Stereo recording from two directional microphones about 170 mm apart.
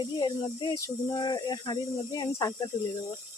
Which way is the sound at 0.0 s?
25° left (ahead or behind).